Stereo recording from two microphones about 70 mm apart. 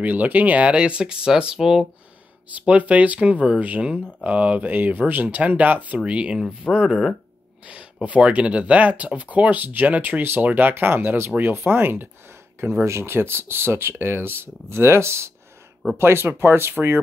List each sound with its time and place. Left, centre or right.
0.0 s speech: right; by 1.9 s centre
2.5 s speech: right